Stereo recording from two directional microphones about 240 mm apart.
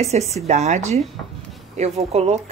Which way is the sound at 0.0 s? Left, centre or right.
Right.